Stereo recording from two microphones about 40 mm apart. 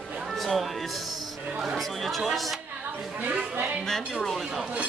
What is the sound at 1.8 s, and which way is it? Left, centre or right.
Speech, centre.